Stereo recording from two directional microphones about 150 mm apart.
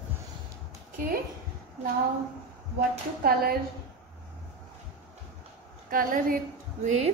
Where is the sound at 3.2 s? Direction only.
90° right.